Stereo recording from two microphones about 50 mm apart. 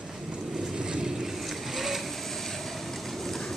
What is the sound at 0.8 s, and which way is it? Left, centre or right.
Vehicle, centre.